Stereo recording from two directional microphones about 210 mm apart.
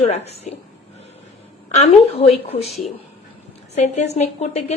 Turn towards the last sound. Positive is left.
turn(degrees=30)  # may be behind; listen again after turning